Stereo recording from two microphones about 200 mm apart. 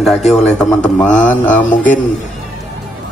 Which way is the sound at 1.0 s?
10° left (ahead or behind).